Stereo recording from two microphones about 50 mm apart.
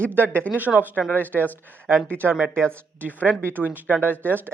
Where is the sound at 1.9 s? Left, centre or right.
Right.